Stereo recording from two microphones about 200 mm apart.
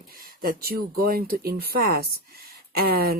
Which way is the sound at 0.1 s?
45° right (ahead or behind).